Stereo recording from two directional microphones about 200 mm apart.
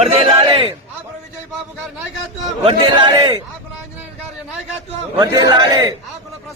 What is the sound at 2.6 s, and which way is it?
Speech, 25° right (ahead or behind).